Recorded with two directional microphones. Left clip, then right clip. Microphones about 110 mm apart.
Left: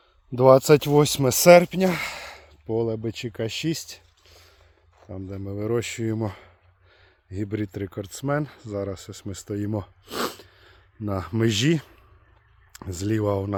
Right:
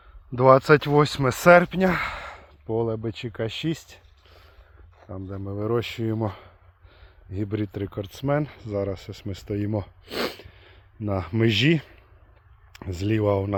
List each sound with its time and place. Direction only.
0.3 s speech: 50° left (ahead or behind)
0.9 s speech: 70° left (ahead or behind)
1.8 s speech: 30° left (ahead or behind); by 9.9 s 15° left (ahead or behind)
10.1 s sniff: 25° left (ahead or behind)
11.3 s speech: 20° left (ahead or behind)